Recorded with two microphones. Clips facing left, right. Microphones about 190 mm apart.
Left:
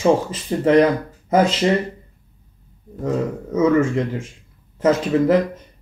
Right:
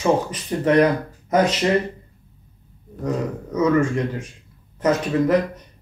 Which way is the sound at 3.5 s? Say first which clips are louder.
Left 2 dB; 25° left (ahead or behind).